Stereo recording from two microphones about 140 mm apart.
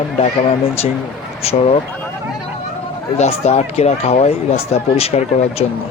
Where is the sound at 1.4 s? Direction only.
45° left (ahead or behind).